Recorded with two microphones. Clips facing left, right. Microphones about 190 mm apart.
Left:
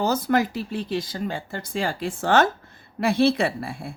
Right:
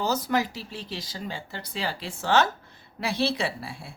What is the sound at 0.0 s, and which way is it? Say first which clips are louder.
A woman's voice: left 4 dB; 55° left (ahead or behind).